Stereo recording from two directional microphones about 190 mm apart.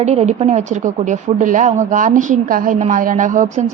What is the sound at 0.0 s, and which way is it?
Speech, 35° right (ahead or behind).